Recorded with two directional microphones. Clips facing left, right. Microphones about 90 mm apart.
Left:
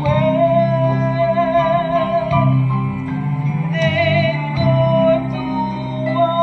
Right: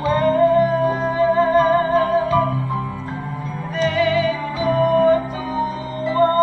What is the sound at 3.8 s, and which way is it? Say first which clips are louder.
Music: even; 35° right (ahead or behind).